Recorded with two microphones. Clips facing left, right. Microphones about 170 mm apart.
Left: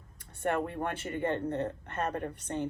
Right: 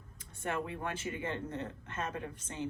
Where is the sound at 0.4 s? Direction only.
60° left (ahead or behind).